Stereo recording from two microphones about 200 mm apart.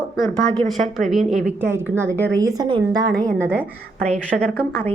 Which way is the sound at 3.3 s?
10° right (ahead or behind).